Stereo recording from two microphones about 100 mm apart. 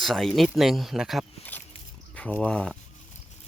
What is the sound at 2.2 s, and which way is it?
Speech, 15° left (ahead or behind).